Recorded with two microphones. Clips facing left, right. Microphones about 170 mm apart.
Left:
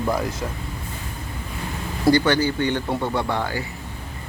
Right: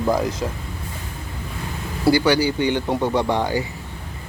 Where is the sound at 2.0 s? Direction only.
10° right (ahead or behind).